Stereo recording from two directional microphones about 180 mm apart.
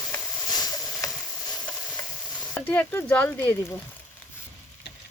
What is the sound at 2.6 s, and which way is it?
Speech, 10° left (ahead or behind).